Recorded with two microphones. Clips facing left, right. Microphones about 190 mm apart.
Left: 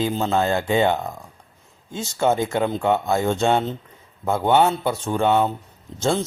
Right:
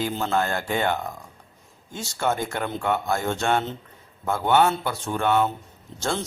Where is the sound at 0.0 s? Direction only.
20° left (ahead or behind).